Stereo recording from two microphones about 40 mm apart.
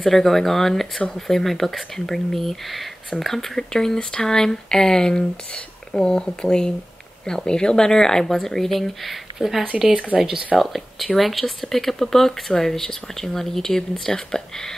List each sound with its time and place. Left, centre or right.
0.0 s speech: centre
10.1 s speech: centre
10.6 s speech: centre